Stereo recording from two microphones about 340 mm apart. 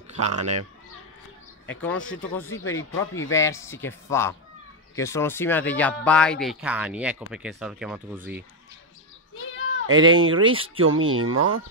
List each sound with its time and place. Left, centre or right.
0.2 s speech: right
1.7 s a man's voice: centre
2.8 s speech: left
3.3 s a man's voice: centre
9.3 s a sound: left
9.8 s speech: right